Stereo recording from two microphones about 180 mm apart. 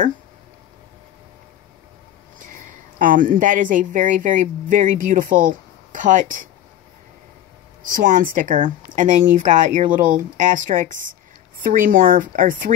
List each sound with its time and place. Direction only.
2.3 s a woman's voice: 45° right (ahead or behind)
7.9 s speech: 50° right (ahead or behind)